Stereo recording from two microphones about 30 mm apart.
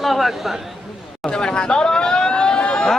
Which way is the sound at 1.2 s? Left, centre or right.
Left.